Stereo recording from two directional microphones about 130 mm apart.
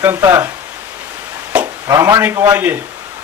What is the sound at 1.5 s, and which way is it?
Chop, 10° right (ahead or behind).